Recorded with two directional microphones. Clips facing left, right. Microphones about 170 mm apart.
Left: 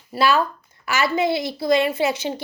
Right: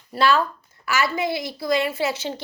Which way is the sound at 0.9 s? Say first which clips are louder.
Left 3 dB; 20° left (ahead or behind).